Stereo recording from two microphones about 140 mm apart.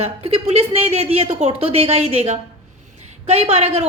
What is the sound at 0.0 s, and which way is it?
A woman's voice, 45° right (ahead or behind).